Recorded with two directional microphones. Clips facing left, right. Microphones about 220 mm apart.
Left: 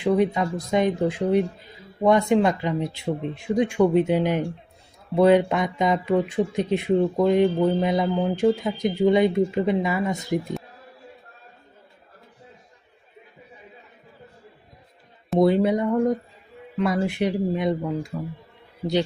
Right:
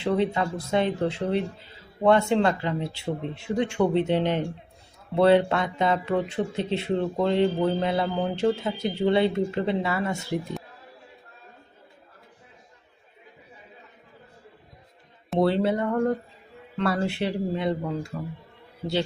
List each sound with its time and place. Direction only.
0.0 s speech: 15° left (ahead or behind)
15.4 s speech: 10° left (ahead or behind)